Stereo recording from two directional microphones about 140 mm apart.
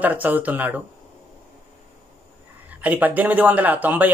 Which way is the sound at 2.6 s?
10° right (ahead or behind).